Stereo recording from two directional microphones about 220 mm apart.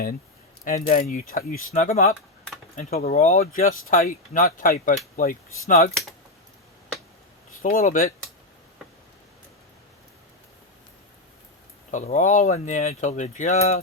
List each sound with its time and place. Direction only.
0.9 s speech: 35° left (ahead or behind)
7.6 s speech: 35° left (ahead or behind)
11.9 s speech: 35° left (ahead or behind)